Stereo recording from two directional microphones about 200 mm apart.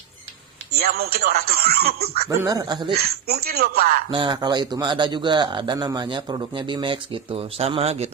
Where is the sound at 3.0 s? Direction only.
50° right (ahead or behind).